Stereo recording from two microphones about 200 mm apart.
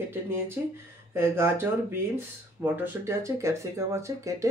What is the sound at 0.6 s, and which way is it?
Speech, 10° right (ahead or behind).